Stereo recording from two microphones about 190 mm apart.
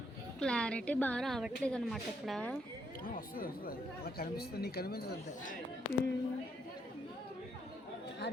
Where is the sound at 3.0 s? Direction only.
50° left (ahead or behind).